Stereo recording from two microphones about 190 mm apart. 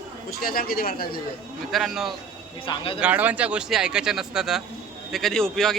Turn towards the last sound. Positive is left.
turn(degrees=0)  # may be behind; listen again after turning